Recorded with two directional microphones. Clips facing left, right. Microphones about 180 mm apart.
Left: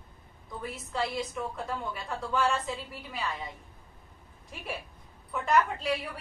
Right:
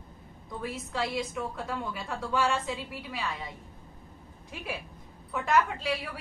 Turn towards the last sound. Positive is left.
turn(degrees=0)  # may be behind; listen again after turning